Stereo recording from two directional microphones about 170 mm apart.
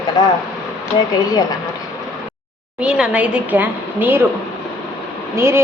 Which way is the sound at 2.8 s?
5° right (ahead or behind).